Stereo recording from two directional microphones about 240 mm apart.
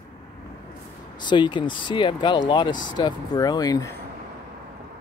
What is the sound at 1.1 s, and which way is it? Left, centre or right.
Speech, centre.